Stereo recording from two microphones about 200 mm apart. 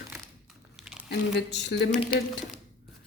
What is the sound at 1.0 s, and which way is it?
Speech, 55° left (ahead or behind).